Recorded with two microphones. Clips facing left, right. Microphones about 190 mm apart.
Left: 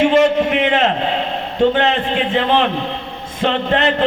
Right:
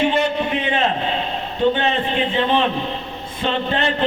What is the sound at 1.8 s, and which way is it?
A man's voice, 90° left.